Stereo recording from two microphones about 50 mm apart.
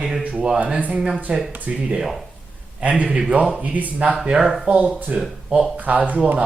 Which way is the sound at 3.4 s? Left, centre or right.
Centre.